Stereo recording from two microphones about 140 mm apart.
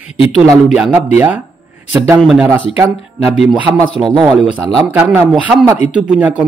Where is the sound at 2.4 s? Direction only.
15° right (ahead or behind).